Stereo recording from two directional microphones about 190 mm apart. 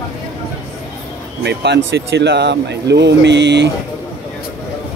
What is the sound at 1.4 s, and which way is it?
Speech, 65° right (ahead or behind).